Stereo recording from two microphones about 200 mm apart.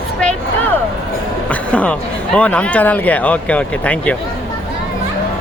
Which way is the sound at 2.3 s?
5° left (ahead or behind).